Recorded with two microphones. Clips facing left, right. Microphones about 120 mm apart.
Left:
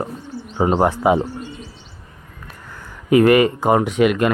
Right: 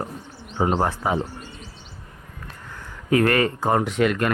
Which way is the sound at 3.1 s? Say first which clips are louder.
Left 7 dB; 10° left (ahead or behind).